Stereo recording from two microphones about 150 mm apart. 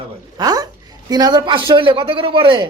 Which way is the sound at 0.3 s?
25° right (ahead or behind).